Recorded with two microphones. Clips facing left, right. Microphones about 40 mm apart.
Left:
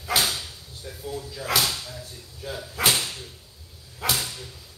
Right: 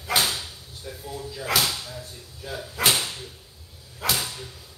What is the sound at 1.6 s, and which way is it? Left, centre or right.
Speech, centre.